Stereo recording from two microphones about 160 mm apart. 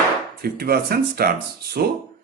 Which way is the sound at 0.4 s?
75° right (ahead or behind).